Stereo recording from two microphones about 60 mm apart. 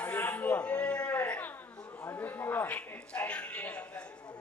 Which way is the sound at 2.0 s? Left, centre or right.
Left.